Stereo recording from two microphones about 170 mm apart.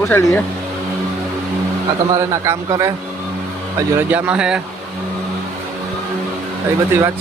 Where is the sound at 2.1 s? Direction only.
15° right (ahead or behind).